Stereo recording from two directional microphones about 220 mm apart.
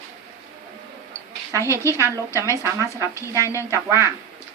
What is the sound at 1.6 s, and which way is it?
Speech, 15° left (ahead or behind).